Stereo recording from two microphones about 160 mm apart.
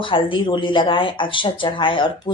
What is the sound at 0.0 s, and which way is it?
Speech, 30° left (ahead or behind).